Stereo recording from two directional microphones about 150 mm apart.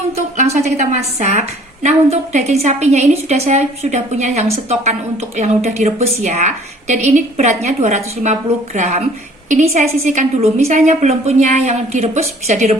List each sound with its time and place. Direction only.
0.3 s a woman's voice: 50° right (ahead or behind)